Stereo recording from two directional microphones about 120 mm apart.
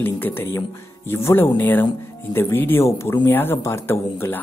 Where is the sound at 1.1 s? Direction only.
20° left (ahead or behind).